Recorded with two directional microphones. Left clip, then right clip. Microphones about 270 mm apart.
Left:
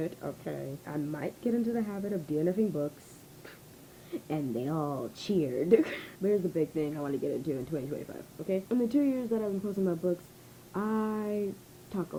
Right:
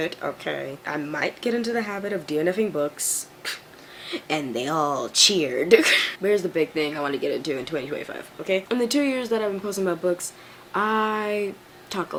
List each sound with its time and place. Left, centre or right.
0.0 s speech: centre
4.1 s speech: centre
5.1 s speech: centre